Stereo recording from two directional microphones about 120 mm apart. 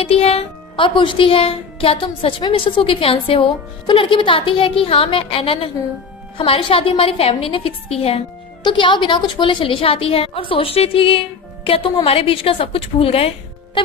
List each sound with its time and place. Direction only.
0.0 s speech: 55° left (ahead or behind)
8.6 s speech: 40° left (ahead or behind)